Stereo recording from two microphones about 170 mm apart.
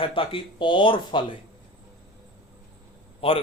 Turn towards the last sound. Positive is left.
turn(degrees=35)  # may be behind; listen again after turning